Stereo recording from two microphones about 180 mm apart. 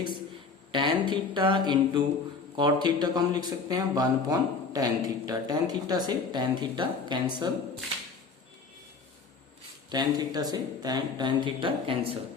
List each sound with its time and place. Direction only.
0.7 s speech: 25° right (ahead or behind)
9.9 s speech: 25° right (ahead or behind)